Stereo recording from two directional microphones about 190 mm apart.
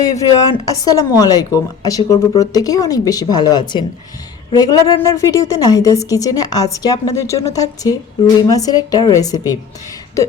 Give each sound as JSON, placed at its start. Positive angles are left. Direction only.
{"t": 0.0, "sound": "a woman's voice", "side_deg": 20}